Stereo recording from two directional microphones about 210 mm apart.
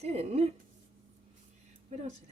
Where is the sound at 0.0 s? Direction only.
30° right (ahead or behind).